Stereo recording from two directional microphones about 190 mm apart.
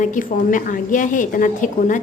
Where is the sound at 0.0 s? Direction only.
45° left (ahead or behind).